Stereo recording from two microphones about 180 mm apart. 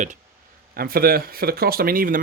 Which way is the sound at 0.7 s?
55° right (ahead or behind).